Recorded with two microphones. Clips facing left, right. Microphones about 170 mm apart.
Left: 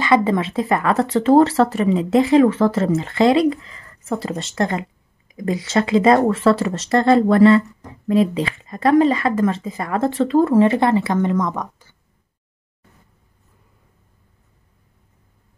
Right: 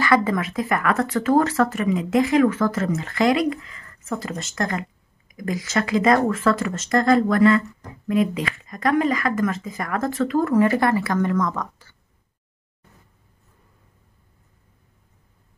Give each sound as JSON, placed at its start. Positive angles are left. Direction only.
{"t": 0.0, "sound": "speech", "side_deg": 25}